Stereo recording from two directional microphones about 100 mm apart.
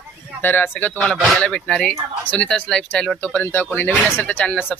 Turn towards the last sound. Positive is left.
turn(degrees=15)  # may be behind; listen again after turning